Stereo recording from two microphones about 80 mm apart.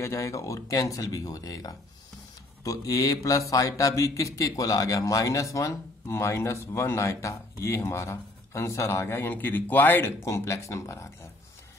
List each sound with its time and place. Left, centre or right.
0.0 s speech: left
10.2 s speech: left